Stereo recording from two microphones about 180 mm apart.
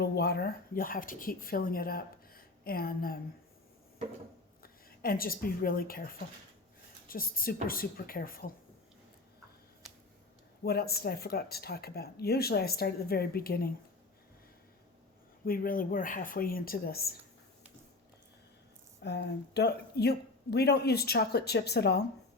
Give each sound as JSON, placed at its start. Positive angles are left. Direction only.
{"t": 0.0, "sound": "speech", "side_deg": 65}
{"t": 4.6, "sound": "speech", "side_deg": 55}
{"t": 10.6, "sound": "speech", "side_deg": 60}
{"t": 15.4, "sound": "speech", "side_deg": 55}
{"t": 19.0, "sound": "speech", "side_deg": 65}